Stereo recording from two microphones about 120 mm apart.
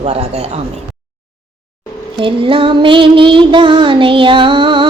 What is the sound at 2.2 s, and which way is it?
Child singing, 45° right (ahead or behind).